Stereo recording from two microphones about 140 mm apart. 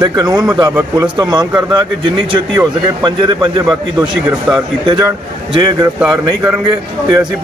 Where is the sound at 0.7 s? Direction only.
15° right (ahead or behind).